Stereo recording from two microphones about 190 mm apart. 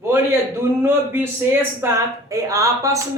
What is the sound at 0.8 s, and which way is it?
Speech, 10° right (ahead or behind).